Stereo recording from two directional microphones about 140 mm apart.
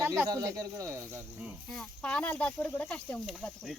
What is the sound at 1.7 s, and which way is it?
Speech, 5° left (ahead or behind).